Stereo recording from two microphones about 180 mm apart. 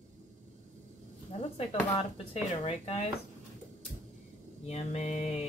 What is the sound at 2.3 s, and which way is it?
Speech, 35° left (ahead or behind).